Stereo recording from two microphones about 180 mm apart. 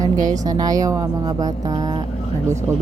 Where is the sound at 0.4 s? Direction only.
20° right (ahead or behind).